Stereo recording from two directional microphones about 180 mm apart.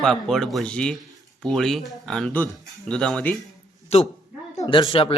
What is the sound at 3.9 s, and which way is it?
A man's voice, 35° left (ahead or behind).